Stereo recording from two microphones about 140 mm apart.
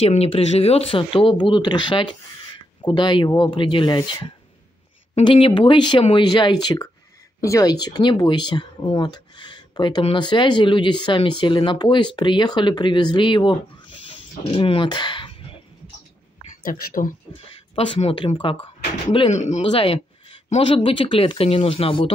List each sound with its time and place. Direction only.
0.0 s speech: 45° left (ahead or behind)
16.6 s speech: 85° left
17.7 s speech: 40° left (ahead or behind)
19.3 s speech: 55° left (ahead or behind)
19.7 s speech: 40° left (ahead or behind)